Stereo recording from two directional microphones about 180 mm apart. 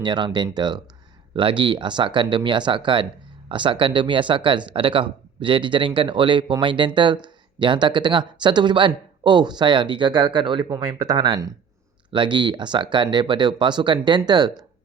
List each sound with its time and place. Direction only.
0.0 s speech: 25° right (ahead or behind)